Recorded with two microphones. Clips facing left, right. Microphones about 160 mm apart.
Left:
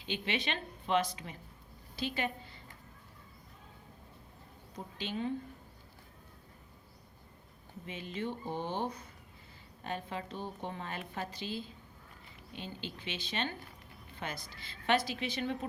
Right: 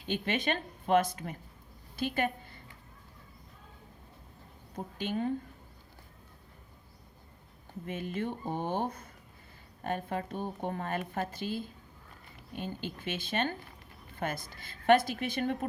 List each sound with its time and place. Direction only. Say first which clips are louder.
0.0 s a woman's voice: right 4 dB; 50° right (ahead or behind)
4.7 s speech: right 5 dB; 50° right (ahead or behind)
7.9 s a woman's voice: right 4 dB; 50° right (ahead or behind)